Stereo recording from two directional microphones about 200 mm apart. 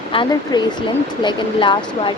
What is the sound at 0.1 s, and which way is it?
Speech, 25° left (ahead or behind).